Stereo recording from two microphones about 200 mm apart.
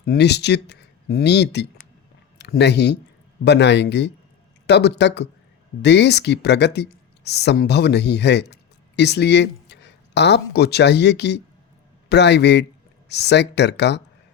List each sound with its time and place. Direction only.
0.0 s speech: 55° left (ahead or behind)